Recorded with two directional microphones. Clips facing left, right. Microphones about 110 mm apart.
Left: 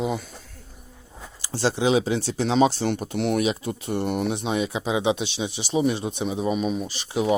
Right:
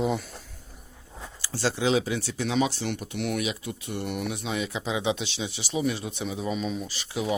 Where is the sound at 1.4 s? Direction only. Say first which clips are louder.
Left 4 dB; 20° left (ahead or behind).